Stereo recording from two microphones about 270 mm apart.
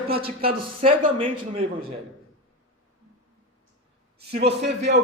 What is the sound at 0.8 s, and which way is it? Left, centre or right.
Speech, right.